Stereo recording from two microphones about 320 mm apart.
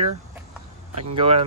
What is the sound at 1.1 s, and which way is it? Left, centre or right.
Speech, centre.